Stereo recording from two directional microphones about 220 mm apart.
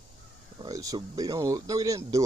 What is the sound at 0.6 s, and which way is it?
Speech, 15° right (ahead or behind).